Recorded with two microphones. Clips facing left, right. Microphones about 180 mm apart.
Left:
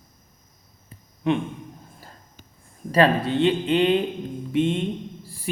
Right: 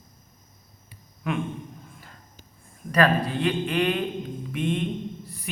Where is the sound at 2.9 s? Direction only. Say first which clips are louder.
Left 3 dB; 25° left (ahead or behind).